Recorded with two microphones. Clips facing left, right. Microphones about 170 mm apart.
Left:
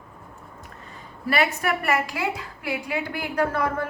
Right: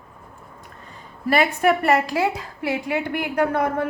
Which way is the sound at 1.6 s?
30° right (ahead or behind).